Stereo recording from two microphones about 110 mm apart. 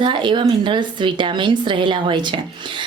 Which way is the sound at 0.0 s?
45° right (ahead or behind).